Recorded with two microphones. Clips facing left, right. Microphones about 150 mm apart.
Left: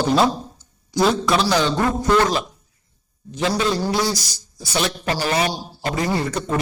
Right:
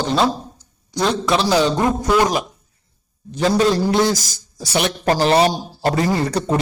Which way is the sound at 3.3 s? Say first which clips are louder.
Right 5 dB; 40° right (ahead or behind).